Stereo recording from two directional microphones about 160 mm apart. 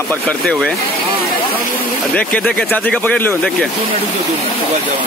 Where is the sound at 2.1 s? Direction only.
10° left (ahead or behind).